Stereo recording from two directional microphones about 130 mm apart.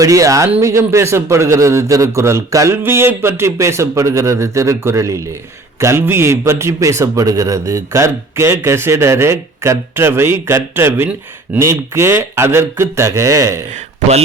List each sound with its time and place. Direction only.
0.0 s a man's voice: 25° right (ahead or behind)